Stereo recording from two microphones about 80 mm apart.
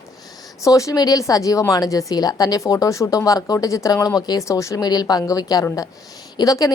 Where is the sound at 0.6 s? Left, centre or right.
Left.